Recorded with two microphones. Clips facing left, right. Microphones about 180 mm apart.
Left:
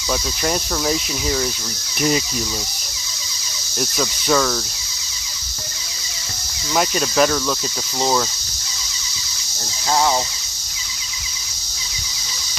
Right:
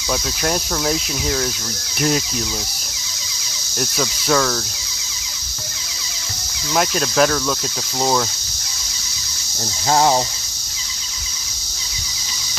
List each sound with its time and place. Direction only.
0.1 s speech: centre (ahead or behind)
3.8 s speech: centre (ahead or behind)
6.7 s speech: centre (ahead or behind)
9.9 s speech: 30° right (ahead or behind)